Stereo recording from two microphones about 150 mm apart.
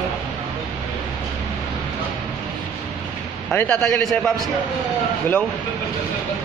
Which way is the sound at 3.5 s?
10° left (ahead or behind).